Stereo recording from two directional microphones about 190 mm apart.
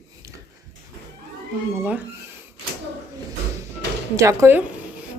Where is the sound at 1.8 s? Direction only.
10° right (ahead or behind).